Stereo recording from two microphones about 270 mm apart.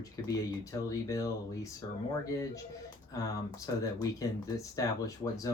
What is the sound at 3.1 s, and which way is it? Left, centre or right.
Speech, centre.